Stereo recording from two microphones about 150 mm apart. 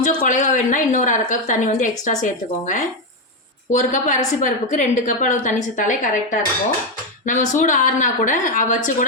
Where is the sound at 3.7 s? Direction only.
55° left (ahead or behind).